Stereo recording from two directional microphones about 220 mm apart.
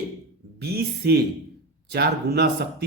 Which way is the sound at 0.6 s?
45° right (ahead or behind).